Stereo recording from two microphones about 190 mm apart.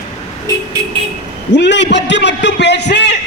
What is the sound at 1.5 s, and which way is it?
A man's voice, 70° left (ahead or behind).